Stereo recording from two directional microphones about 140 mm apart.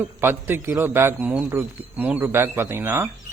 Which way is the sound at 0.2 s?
15° right (ahead or behind).